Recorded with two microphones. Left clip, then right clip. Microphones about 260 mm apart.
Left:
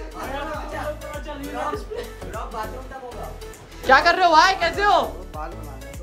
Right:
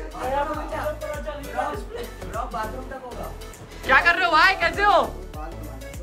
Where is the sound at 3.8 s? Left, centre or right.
Centre.